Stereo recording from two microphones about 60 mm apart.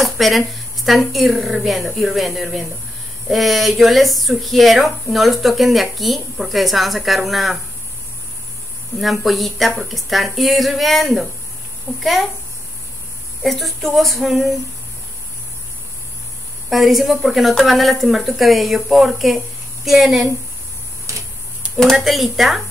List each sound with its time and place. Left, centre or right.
0.0 s speech: centre
8.9 s speech: centre
13.4 s speech: centre
16.6 s speech: centre
21.1 s a sound: right
21.9 s speech: centre